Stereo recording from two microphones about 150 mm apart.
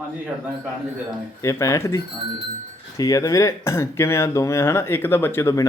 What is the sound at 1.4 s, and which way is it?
A man's voice, 20° left (ahead or behind).